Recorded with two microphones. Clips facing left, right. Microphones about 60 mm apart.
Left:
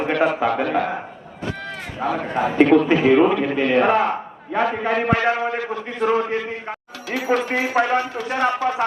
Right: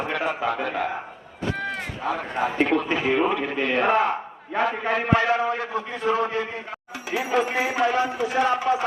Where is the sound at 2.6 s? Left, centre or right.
Left.